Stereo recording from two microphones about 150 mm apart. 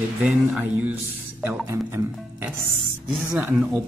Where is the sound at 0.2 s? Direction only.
10° right (ahead or behind).